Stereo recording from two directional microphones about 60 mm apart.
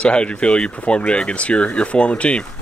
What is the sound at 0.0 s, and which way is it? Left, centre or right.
Speech, centre.